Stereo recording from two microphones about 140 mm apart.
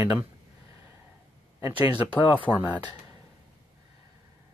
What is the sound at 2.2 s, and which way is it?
Speech, 35° left (ahead or behind).